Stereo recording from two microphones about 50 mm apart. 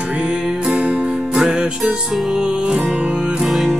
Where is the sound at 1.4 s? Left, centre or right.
Centre.